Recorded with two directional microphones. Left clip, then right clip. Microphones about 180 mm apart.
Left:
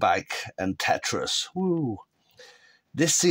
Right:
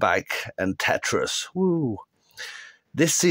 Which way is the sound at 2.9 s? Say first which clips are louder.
Right 2 dB; 25° right (ahead or behind).